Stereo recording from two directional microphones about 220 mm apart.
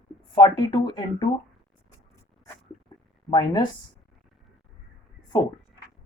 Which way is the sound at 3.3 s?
20° left (ahead or behind).